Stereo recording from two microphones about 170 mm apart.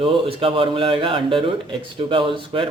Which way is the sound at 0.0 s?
35° right (ahead or behind).